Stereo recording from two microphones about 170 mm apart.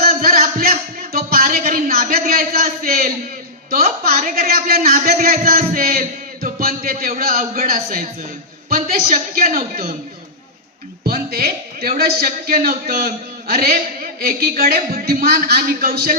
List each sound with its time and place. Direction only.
0.1 s music: 55° right (ahead or behind)
2.1 s a sound: 55° right (ahead or behind)
4.4 s a man's voice: 60° right (ahead or behind)
7.9 s a man's voice: 40° right (ahead or behind)
9.0 s a man's voice: 50° right (ahead or behind)
11.0 s a man's voice: 65° right (ahead or behind)